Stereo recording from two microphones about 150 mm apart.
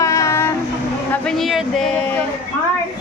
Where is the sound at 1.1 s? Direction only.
5° left (ahead or behind).